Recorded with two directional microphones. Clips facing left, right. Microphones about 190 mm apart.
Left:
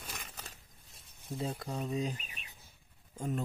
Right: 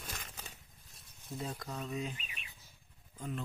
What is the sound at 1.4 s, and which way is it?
Speech, 30° left (ahead or behind).